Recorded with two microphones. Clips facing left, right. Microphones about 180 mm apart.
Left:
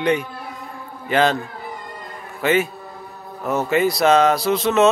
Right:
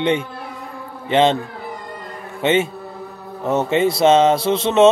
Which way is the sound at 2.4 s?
25° right (ahead or behind).